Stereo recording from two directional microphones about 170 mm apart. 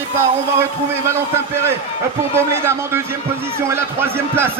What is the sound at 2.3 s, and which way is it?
A man's voice, 15° right (ahead or behind).